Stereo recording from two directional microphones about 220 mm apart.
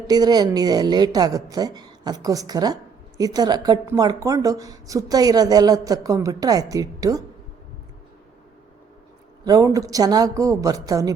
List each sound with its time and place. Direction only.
0.1 s a woman's voice: 20° right (ahead or behind)
9.4 s a woman's voice: 15° right (ahead or behind)